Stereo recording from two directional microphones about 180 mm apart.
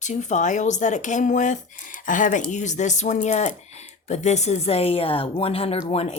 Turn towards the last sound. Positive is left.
turn(degrees=35)  # may be behind; listen again after turning